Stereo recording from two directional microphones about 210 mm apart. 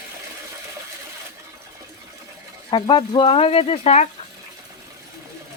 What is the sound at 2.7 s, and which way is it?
Speech, 20° left (ahead or behind).